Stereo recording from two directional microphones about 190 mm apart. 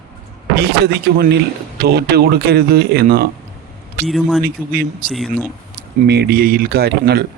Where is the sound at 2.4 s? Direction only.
60° right (ahead or behind).